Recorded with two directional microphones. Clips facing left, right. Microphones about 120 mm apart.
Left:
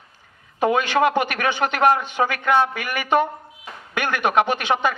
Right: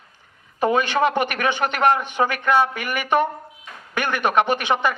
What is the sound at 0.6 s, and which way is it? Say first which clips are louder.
Speech: left 1 dB; 15° left (ahead or behind).